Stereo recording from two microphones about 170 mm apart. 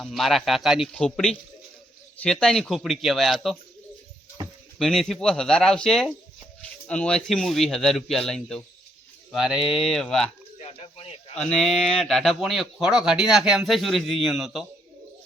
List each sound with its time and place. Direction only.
0.0 s speech: centre (ahead or behind)
4.8 s speech: centre (ahead or behind)
10.6 s a sound: 40° left (ahead or behind)
11.3 s speech: 5° left (ahead or behind)